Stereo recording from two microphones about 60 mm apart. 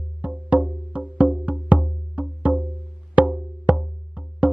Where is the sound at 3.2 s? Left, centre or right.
Centre.